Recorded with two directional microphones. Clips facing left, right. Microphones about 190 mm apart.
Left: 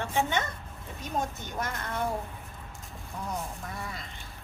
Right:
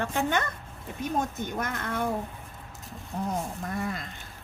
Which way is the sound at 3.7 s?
50° right (ahead or behind).